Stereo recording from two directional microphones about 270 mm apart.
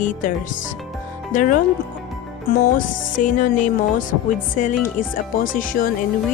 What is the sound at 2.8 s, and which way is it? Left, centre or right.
Speech, left.